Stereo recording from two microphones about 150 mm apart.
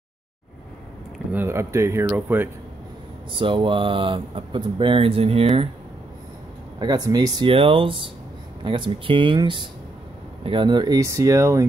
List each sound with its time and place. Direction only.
1.3 s speech: 15° right (ahead or behind)
3.3 s speech: 35° right (ahead or behind)
6.8 s speech: 25° right (ahead or behind)